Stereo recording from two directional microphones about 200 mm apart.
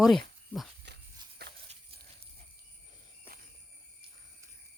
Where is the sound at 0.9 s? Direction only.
55° right (ahead or behind).